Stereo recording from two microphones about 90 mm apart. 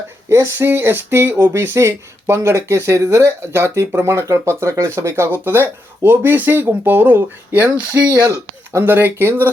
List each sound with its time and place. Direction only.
0.3 s speech: 30° right (ahead or behind)